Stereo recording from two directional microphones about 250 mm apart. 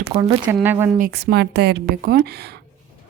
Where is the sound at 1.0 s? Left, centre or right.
Right.